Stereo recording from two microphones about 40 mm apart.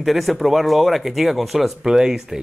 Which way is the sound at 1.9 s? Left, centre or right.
Centre.